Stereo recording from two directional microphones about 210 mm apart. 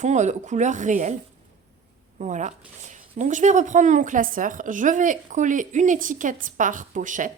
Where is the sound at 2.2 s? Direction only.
35° right (ahead or behind).